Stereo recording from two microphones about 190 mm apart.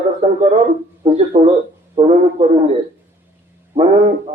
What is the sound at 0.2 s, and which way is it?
A man's voice, 30° right (ahead or behind).